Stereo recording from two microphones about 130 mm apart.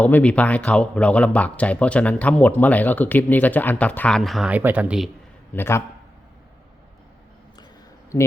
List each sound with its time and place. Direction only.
0.0 s speech: 10° left (ahead or behind)
4.2 s speech: centre (ahead or behind)
4.5 s speech: 10° right (ahead or behind)
5.5 s a man's voice: 20° left (ahead or behind)